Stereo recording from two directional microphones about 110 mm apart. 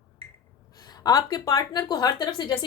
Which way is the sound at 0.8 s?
40° left (ahead or behind).